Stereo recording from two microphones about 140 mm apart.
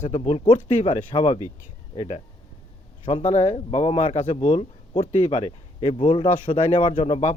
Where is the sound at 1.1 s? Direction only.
35° left (ahead or behind).